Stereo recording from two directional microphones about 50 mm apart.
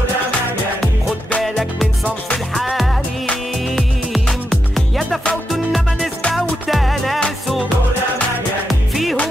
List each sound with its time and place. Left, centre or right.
2.5 s music: centre
8.6 s music: centre